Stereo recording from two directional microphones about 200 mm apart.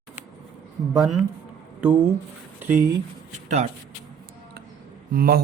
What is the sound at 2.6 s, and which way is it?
Speech, 10° right (ahead or behind).